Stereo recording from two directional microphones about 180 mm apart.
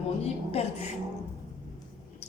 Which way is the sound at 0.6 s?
35° left (ahead or behind).